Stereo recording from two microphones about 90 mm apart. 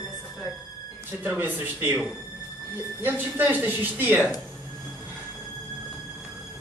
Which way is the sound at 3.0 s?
20° right (ahead or behind).